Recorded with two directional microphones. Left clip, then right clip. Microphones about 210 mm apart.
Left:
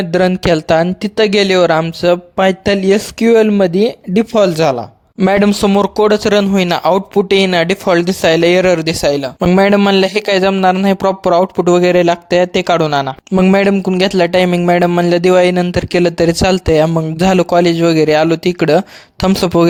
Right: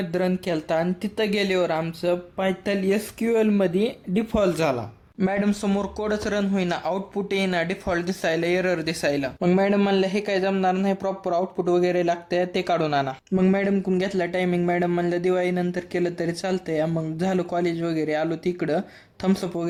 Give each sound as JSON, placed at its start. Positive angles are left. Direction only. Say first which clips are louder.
{"t": 0.1, "sound": "speech", "louder": "left 14 dB", "side_deg": 45}